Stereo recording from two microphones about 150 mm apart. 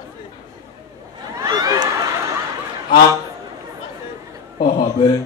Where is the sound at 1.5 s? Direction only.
25° right (ahead or behind).